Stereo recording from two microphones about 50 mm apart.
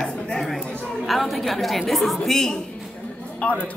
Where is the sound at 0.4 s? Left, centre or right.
Centre.